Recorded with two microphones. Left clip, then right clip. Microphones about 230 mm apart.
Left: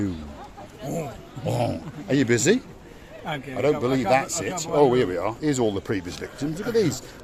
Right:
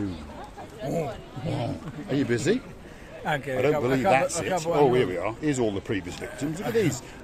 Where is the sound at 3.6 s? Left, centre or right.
Centre.